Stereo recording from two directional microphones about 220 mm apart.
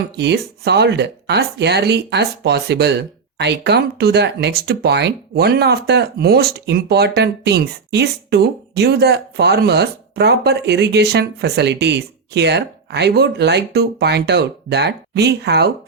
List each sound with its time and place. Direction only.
0.2 s speech: 50° right (ahead or behind)